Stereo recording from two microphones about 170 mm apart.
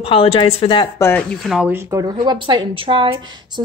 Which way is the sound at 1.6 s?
15° right (ahead or behind).